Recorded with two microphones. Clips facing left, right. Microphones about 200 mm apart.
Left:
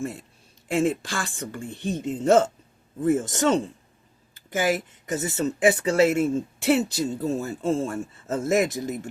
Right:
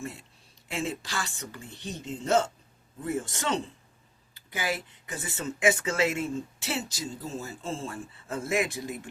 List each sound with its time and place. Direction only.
0.0 s a man's voice: 50° left (ahead or behind)